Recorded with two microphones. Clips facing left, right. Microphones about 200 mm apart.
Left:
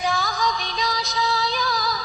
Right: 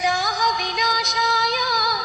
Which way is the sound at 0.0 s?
80° right.